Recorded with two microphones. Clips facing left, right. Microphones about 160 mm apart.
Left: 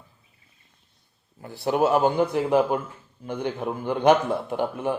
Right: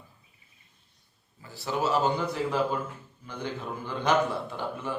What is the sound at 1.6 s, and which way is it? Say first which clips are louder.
Speech: left 6 dB; 55° left (ahead or behind).